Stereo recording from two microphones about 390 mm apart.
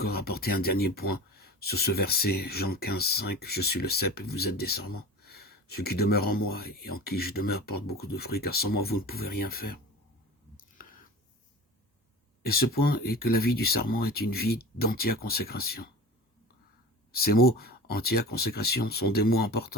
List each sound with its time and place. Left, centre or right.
0.0 s speech: left
10.8 s a sound: left
12.4 s speech: left
17.2 s speech: left